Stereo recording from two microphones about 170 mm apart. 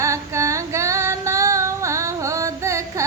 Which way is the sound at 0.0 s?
15° right (ahead or behind).